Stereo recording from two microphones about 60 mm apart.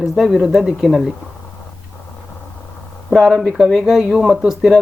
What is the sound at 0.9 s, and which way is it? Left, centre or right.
Speech, centre.